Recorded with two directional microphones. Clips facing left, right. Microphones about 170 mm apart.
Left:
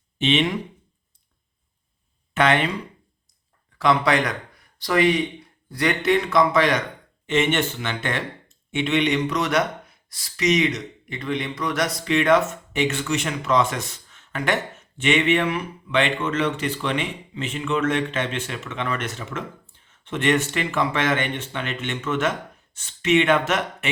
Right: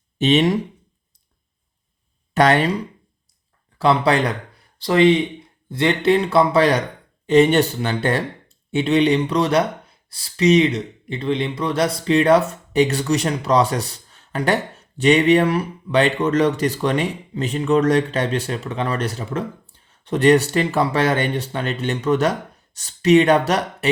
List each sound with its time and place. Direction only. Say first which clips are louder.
0.2 s speech: right 5 dB; 40° right (ahead or behind)
2.3 s speech: right 4 dB; 40° right (ahead or behind)